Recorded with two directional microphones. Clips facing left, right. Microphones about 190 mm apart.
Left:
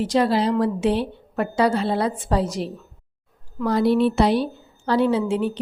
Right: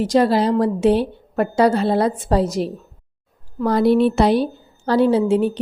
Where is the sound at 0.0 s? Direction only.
40° right (ahead or behind).